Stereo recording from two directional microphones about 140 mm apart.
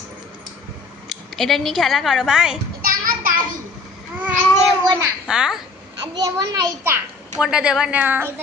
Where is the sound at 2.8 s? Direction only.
90° right.